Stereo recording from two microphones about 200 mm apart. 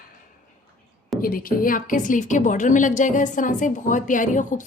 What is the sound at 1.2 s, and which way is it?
A woman's voice, 45° left (ahead or behind).